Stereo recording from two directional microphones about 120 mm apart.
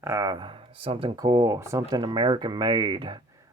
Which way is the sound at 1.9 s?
40° right (ahead or behind).